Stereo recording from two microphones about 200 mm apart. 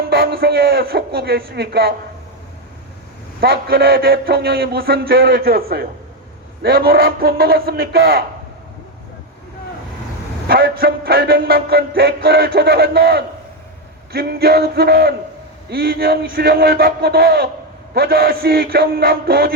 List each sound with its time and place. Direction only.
0.1 s music: 50° right (ahead or behind)
3.4 s music: 50° right (ahead or behind)
10.5 s music: 50° right (ahead or behind)